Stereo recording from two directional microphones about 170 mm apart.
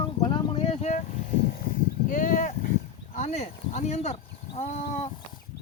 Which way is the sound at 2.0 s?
50° left (ahead or behind).